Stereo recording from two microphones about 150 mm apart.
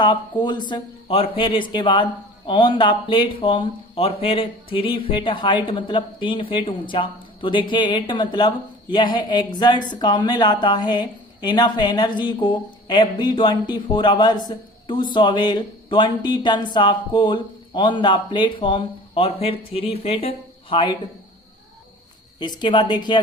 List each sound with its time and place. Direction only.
0.0 s a woman's voice: 30° left (ahead or behind)
22.4 s a woman's voice: 30° left (ahead or behind)